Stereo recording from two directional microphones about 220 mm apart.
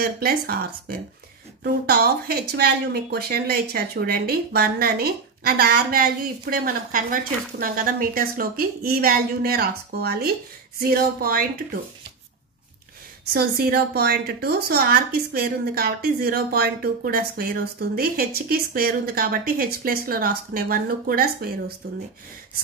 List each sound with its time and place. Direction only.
0.0 s speech: 45° right (ahead or behind)
13.3 s speech: 45° right (ahead or behind)